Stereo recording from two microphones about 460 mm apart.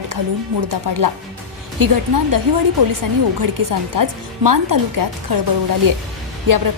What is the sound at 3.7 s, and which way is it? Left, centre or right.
A woman's voice, right.